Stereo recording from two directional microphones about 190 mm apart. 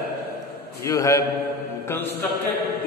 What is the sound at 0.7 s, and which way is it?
Mantra, 15° left (ahead or behind).